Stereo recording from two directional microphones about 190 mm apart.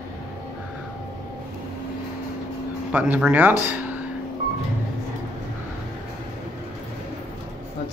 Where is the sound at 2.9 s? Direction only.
5° right (ahead or behind).